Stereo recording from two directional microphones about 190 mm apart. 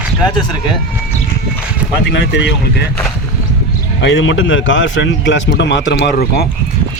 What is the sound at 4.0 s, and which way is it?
A man's voice, 75° left (ahead or behind).